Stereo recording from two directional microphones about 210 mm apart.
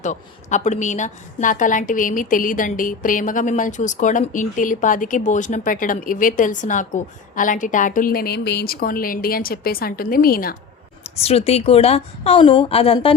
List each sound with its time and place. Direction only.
0.0 s a woman's voice: 35° left (ahead or behind)
11.0 s a woman's voice: 30° left (ahead or behind)